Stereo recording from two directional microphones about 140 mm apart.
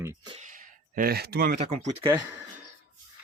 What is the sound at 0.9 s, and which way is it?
Speech, 90° right.